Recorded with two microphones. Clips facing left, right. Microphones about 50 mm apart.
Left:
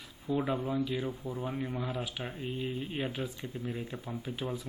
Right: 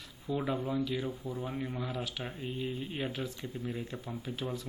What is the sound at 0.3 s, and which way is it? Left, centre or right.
Speech, centre.